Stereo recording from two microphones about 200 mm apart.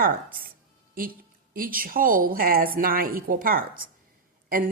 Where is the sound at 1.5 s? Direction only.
45° right (ahead or behind).